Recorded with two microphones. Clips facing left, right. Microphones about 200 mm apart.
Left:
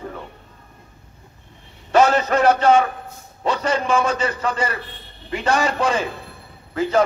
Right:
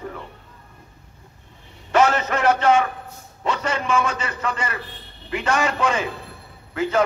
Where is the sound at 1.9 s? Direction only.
35° left (ahead or behind).